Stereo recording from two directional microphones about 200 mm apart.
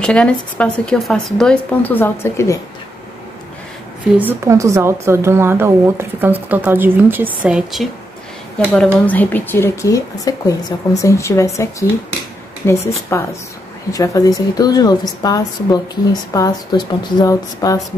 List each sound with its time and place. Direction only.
0.0 s speech: 5° left (ahead or behind)
4.2 s a woman's voice: 10° right (ahead or behind); by 17.7 s 15° left (ahead or behind)